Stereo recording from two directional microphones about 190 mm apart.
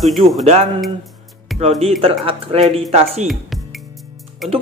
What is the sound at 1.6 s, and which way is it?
Speech, 35° right (ahead or behind).